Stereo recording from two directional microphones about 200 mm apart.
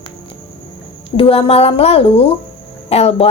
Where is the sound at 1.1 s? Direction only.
30° left (ahead or behind).